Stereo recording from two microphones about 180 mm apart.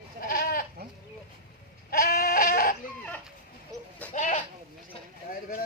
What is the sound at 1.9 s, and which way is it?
Goat, 55° left (ahead or behind).